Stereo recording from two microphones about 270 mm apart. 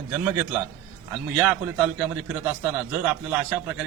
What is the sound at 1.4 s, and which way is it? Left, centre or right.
A man's voice, centre.